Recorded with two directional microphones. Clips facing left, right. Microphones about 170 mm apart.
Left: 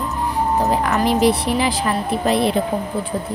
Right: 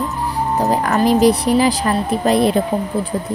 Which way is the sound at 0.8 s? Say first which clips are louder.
Right 5 dB; 40° right (ahead or behind).